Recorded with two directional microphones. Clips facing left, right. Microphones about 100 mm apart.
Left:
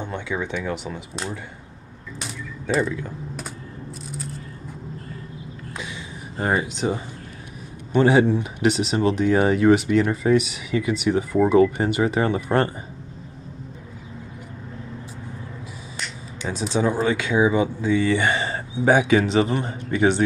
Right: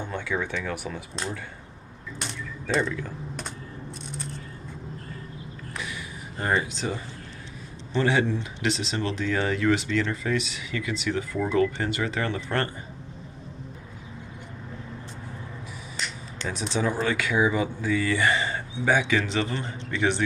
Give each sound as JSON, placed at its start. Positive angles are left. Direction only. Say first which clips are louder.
{"t": 0.0, "sound": "speech", "louder": "left 2 dB", "side_deg": 15}
{"t": 2.7, "sound": "speech", "louder": "left 3 dB", "side_deg": 5}
{"t": 5.8, "sound": "speech", "louder": "left 1 dB", "side_deg": 25}
{"t": 8.0, "sound": "speech", "louder": "left 7 dB", "side_deg": 20}
{"t": 11.8, "sound": "speech", "louder": "left 7 dB", "side_deg": 25}
{"t": 16.4, "sound": "speech", "louder": "left 5 dB", "side_deg": 15}